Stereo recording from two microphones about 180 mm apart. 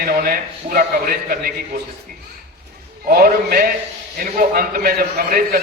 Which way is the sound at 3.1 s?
55° right (ahead or behind).